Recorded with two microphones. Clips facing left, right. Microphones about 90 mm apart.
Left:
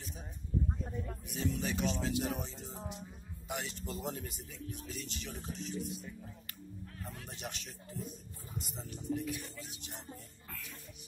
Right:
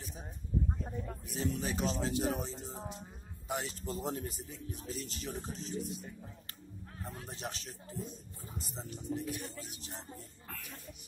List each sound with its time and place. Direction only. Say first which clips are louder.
1.3 s speech: even; 35° right (ahead or behind)